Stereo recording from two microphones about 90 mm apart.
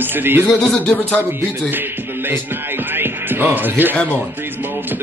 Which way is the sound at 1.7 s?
20° right (ahead or behind).